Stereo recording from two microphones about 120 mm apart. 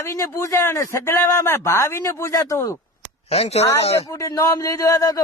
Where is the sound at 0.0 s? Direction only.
25° left (ahead or behind).